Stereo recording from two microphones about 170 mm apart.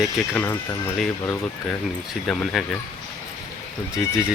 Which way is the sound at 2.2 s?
Centre (ahead or behind).